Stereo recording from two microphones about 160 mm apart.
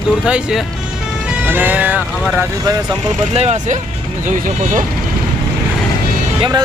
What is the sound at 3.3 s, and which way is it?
Speech, 45° right (ahead or behind).